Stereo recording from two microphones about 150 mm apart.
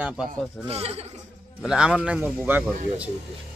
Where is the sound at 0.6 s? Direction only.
45° right (ahead or behind).